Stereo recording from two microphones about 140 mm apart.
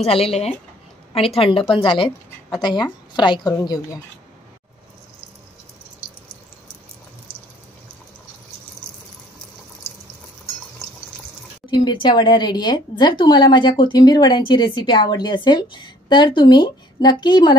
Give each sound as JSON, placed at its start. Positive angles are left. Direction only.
{"t": 0.0, "sound": "speech", "side_deg": 45}
{"t": 11.7, "sound": "speech", "side_deg": 35}